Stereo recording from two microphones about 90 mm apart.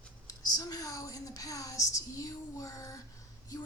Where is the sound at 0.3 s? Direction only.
45° left (ahead or behind).